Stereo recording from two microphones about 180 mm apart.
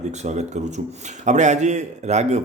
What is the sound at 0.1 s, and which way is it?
A man's voice, 40° right (ahead or behind).